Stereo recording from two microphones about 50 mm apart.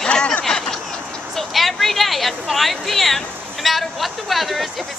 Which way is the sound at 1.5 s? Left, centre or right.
Centre.